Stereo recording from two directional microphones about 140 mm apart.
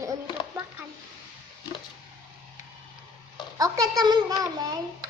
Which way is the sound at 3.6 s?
25° right (ahead or behind).